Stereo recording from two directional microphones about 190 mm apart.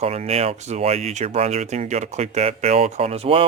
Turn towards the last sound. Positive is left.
turn(degrees=-30)  # may be behind; listen again after turning